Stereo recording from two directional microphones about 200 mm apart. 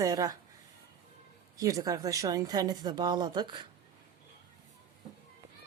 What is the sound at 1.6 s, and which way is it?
A woman's voice, 15° right (ahead or behind).